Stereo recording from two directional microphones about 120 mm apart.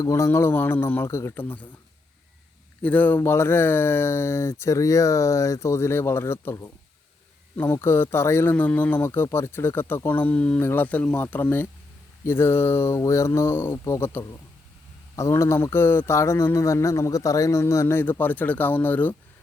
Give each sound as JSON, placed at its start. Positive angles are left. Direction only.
{"t": 0.0, "sound": "speech", "side_deg": 25}
{"t": 2.8, "sound": "speech", "side_deg": 15}